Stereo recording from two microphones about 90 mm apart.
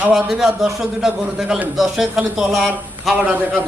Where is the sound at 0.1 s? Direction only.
5° right (ahead or behind).